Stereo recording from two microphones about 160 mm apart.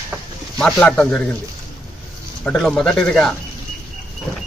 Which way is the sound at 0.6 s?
5° left (ahead or behind).